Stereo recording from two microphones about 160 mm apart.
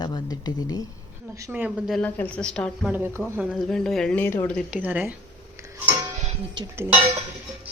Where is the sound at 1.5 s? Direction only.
10° right (ahead or behind).